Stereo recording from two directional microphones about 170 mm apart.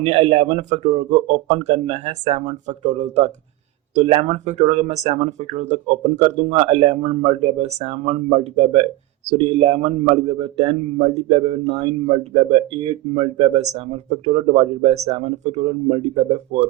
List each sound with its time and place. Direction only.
0.0 s a man's voice: 40° right (ahead or behind)